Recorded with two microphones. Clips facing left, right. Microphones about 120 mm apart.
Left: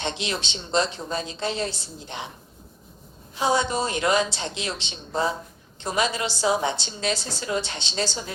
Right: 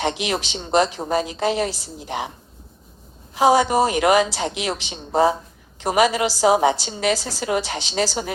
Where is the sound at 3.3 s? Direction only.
90° right.